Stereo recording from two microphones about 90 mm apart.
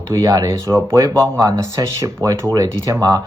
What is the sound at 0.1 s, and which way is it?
Speech, 35° right (ahead or behind).